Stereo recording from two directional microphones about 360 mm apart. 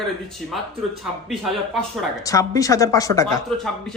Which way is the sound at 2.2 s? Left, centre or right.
Centre.